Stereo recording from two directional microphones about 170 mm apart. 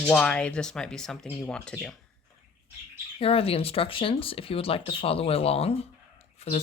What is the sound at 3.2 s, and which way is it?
Speech, 35° left (ahead or behind).